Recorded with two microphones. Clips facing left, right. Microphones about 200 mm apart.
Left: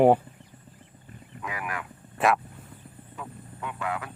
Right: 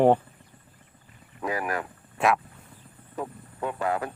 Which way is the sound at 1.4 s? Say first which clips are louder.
Right 6 dB; 35° right (ahead or behind).